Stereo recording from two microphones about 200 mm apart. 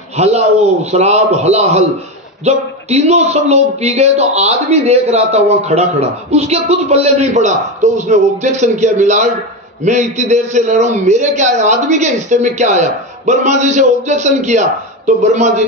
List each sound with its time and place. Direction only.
0.2 s speech: 30° right (ahead or behind)